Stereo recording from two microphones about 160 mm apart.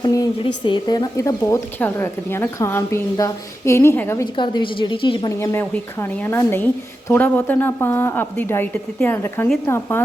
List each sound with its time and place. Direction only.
0.0 s speech: 25° left (ahead or behind)
4.4 s a woman's voice: 30° left (ahead or behind)
5.4 s a woman's voice: 15° left (ahead or behind)